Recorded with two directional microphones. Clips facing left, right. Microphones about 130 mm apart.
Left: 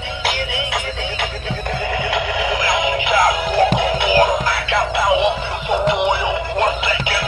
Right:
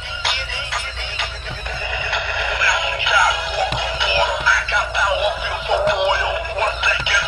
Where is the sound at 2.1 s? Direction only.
45° left (ahead or behind).